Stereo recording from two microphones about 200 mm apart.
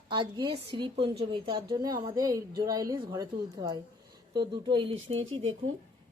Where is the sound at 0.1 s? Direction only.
20° right (ahead or behind).